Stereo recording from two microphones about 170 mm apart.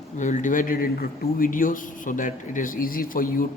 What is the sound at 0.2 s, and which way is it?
Speech, 45° left (ahead or behind).